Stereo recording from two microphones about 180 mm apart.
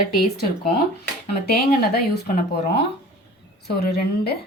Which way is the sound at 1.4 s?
60° left (ahead or behind).